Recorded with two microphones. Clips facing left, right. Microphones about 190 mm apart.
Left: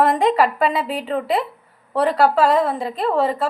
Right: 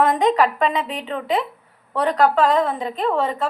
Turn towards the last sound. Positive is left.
turn(degrees=5)  # may be behind; listen again after turning